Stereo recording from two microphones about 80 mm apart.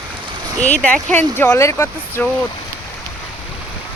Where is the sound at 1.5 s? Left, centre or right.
Left.